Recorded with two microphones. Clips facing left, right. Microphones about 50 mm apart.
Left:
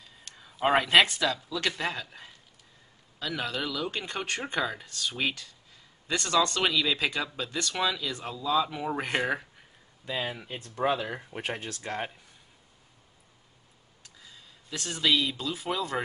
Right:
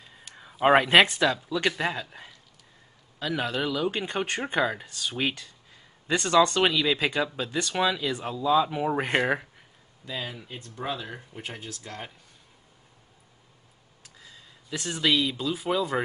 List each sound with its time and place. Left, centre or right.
0.2 s a sound: centre
0.8 s speech: right
10.0 s speech: left
11.3 s speech: left
14.2 s speech: centre